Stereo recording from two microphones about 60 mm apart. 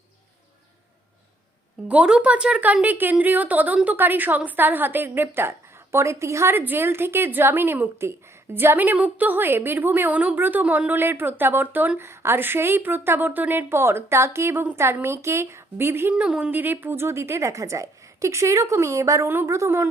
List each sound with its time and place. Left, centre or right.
1.9 s a woman's voice: centre; by 6.5 s right
6.5 s a woman's voice: right
11.9 s a woman's voice: right
13.7 s a woman's voice: right
16.1 s a woman's voice: centre
16.5 s a woman's voice: right